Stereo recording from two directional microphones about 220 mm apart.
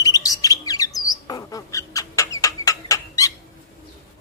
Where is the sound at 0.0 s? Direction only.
15° left (ahead or behind).